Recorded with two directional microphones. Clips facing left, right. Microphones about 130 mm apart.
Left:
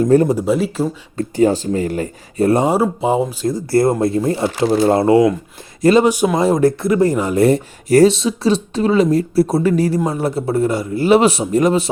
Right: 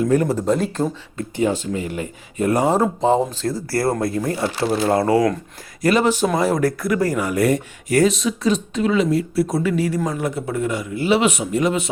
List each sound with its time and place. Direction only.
0.0 s speech: 30° left (ahead or behind)
0.3 s speech: 10° left (ahead or behind)
1.1 s speech: 35° left (ahead or behind)
2.6 s speech: 10° left (ahead or behind); by 6.1 s 25° left (ahead or behind)
6.1 s speech: 15° left (ahead or behind)
6.4 s speech: 25° left (ahead or behind)